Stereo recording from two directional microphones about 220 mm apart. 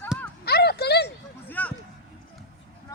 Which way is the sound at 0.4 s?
45° left (ahead or behind).